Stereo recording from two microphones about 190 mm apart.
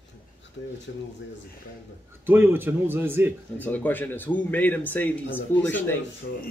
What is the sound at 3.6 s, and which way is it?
Speech, 10° left (ahead or behind).